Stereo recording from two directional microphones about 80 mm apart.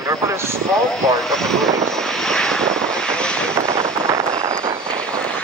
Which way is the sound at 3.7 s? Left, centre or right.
Right.